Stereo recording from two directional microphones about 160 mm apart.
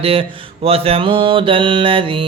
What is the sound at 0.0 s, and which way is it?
Mantra, 35° right (ahead or behind).